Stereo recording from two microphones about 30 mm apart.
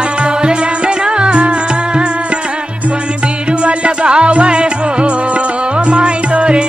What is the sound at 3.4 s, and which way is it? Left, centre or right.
Music, right.